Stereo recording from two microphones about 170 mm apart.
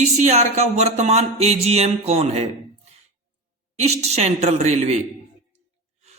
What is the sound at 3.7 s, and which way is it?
A man's voice, 40° right (ahead or behind).